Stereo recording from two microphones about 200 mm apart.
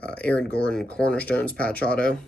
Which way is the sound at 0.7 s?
5° left (ahead or behind).